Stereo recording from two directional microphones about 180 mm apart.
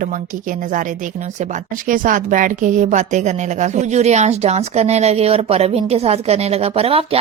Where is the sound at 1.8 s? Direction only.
50° right (ahead or behind).